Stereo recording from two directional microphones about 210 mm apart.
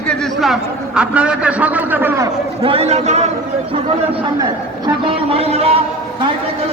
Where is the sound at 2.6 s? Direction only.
30° right (ahead or behind).